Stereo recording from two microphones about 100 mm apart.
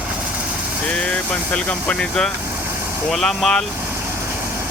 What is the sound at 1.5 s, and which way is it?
Speech, 10° left (ahead or behind).